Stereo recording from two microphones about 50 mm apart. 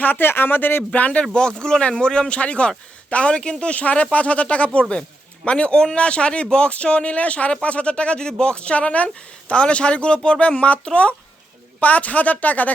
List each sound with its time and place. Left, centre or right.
0.0 s speech: left
0.9 s speech: left
1.2 s speech: centre; by 12.7 s left